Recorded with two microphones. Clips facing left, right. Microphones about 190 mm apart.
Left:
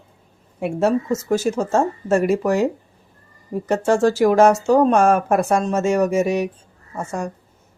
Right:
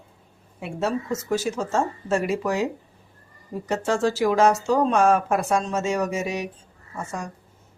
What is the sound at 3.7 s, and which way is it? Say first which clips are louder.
Speech: left 6 dB; 50° left (ahead or behind).